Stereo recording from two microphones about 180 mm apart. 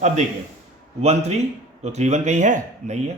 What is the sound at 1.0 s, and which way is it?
Speech, 35° right (ahead or behind).